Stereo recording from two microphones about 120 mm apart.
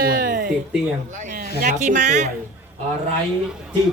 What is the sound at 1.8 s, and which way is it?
Speech, 90° right.